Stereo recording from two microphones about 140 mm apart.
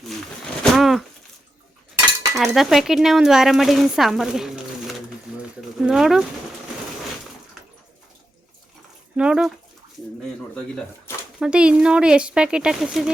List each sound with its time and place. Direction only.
0.6 s a sound: centre (ahead or behind)
2.3 s speech: centre (ahead or behind)
9.1 s speech: 5° right (ahead or behind)
11.3 s speech: 5° right (ahead or behind)